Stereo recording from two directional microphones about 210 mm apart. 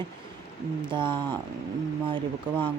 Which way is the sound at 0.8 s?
25° right (ahead or behind).